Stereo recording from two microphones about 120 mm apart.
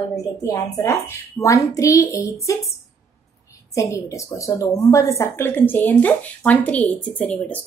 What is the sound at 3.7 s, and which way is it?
A woman's voice, 25° left (ahead or behind).